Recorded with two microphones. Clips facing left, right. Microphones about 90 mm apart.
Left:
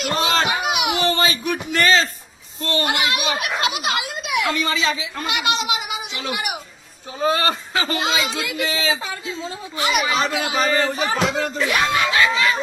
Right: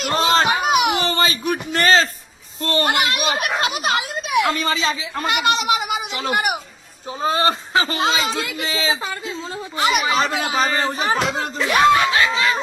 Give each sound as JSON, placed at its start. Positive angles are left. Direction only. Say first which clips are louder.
{"t": 0.0, "sound": "a sound", "louder": "right 3 dB", "side_deg": -40}
{"t": 2.6, "sound": "a child's voice", "louder": "right 2 dB", "side_deg": -45}
{"t": 7.2, "sound": "a child's voice", "louder": "right 1 dB", "side_deg": -30}